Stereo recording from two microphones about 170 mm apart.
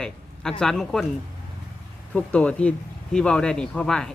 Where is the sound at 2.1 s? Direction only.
5° left (ahead or behind).